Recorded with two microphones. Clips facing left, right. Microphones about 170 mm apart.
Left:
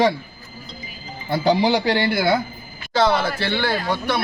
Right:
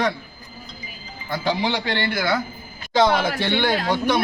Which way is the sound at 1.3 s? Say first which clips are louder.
Left 5 dB; 35° left (ahead or behind).